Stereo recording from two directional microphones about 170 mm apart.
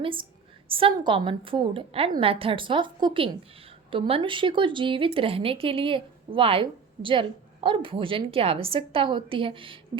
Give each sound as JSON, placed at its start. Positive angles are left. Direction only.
{"t": 0.0, "sound": "speech", "side_deg": -30}